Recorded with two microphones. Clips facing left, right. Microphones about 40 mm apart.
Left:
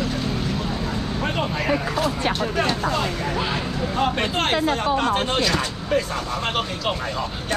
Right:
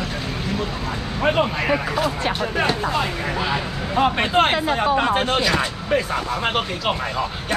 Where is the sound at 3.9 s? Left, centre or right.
Centre.